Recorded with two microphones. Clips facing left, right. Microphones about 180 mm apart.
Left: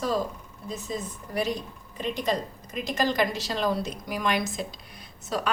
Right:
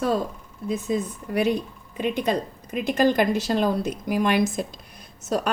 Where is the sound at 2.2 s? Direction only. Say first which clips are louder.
Right 3 dB; 60° right (ahead or behind).